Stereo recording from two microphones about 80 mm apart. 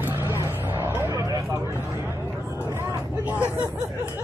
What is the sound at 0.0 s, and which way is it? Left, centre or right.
Vehicle, right.